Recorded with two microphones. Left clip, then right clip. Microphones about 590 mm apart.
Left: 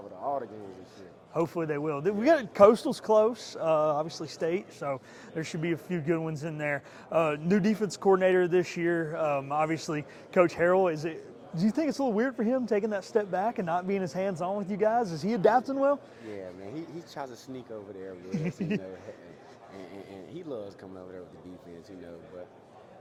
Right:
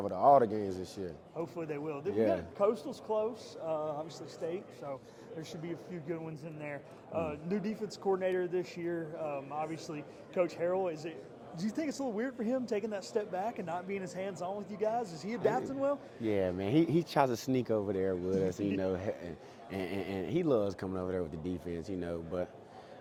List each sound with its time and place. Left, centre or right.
0.2 s a sound: right
1.4 s a man's voice: left
2.6 s a man's voice: left
16.3 s speech: right
19.9 s speech: right